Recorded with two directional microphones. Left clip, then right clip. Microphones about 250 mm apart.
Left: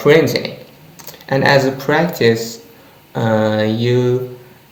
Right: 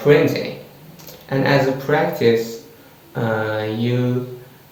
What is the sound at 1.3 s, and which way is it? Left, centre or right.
Speech, left.